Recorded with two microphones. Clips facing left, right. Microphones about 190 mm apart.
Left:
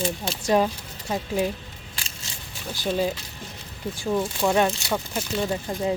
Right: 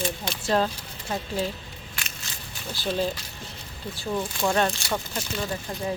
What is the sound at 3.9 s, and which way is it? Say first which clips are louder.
Speech: left 4 dB; 15° left (ahead or behind).